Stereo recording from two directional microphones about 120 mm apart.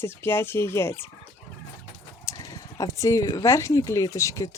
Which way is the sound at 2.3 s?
30° left (ahead or behind).